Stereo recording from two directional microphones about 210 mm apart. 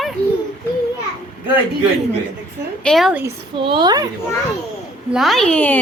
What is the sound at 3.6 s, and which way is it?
Speech, 25° right (ahead or behind).